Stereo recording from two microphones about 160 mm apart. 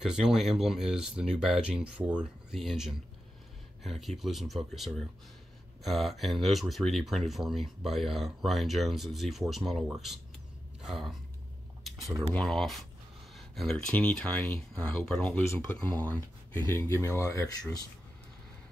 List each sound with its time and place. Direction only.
0.0 s speech: 5° right (ahead or behind)
11.8 s a sound: centre (ahead or behind)
12.3 s speech: 5° left (ahead or behind)
15.4 s speech: 15° left (ahead or behind)